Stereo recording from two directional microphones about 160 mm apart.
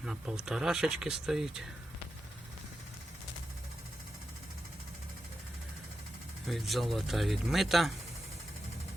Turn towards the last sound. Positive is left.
turn(degrees=0)  # may be behind; listen again after turning